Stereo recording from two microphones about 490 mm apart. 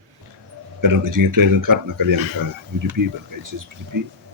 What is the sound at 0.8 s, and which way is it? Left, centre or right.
Speech, right.